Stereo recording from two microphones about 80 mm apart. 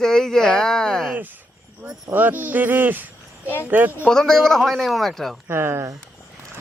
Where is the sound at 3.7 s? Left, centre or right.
Right.